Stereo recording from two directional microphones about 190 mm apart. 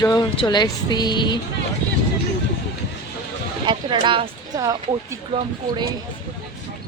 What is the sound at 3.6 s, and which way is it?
Speech, 25° right (ahead or behind).